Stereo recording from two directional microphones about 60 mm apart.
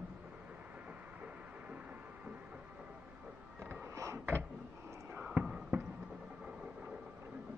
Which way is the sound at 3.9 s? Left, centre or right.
Right.